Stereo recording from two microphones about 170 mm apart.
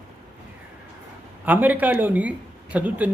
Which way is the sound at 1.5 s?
10° right (ahead or behind).